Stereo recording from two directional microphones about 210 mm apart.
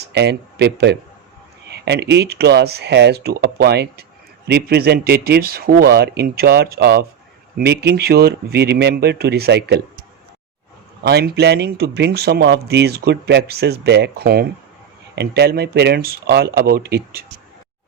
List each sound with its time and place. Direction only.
0.0 s speech: 55° right (ahead or behind)
11.0 s speech: 50° right (ahead or behind)